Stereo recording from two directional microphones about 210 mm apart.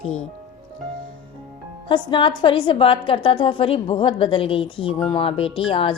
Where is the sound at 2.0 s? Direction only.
25° left (ahead or behind).